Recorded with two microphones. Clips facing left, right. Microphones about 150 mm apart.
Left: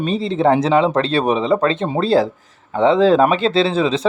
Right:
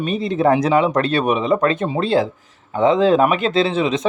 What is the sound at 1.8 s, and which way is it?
Speech, 40° left (ahead or behind).